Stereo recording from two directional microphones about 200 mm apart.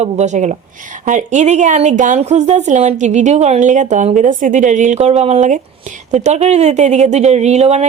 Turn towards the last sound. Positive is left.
turn(degrees=-35)  # may be behind; listen again after turning